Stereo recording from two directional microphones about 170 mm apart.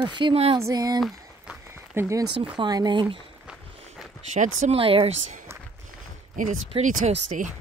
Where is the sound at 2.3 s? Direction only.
30° right (ahead or behind).